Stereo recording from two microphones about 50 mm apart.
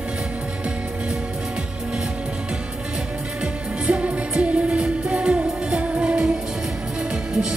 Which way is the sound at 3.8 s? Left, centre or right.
Centre.